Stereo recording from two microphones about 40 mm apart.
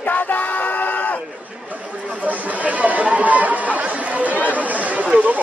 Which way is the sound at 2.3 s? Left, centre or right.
Right.